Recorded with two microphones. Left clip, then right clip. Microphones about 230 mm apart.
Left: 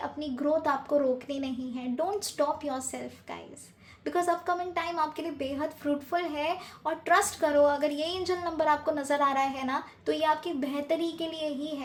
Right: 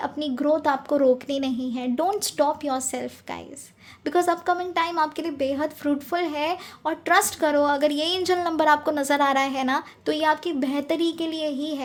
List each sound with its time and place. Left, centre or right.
0.0 s a woman's voice: right